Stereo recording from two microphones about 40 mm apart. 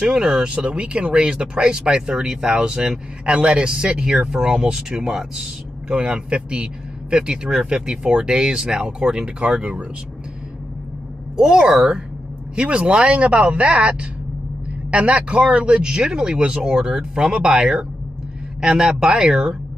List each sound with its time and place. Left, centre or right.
0.0 s speech: centre
0.6 s speech: right
11.3 s speech: centre